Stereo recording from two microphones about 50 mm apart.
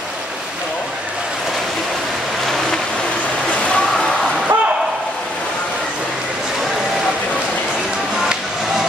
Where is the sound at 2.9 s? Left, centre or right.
Left.